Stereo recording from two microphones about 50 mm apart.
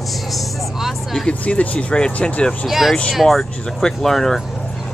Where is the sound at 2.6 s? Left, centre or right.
Centre.